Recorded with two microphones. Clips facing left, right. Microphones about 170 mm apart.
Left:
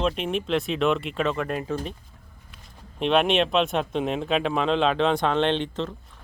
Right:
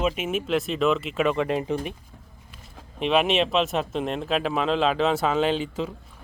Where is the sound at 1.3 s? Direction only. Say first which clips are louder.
Right 3 dB; 15° right (ahead or behind).